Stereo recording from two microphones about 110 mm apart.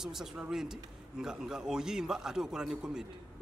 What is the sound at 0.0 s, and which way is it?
A man's voice, 5° right (ahead or behind).